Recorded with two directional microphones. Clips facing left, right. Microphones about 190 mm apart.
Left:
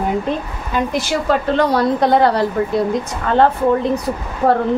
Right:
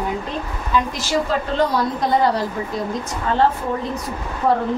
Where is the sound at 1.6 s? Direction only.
65° left (ahead or behind).